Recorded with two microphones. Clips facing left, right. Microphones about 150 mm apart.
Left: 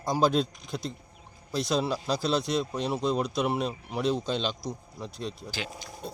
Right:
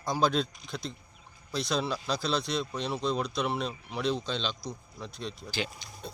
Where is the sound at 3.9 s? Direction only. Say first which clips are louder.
Left 2 dB; 5° left (ahead or behind).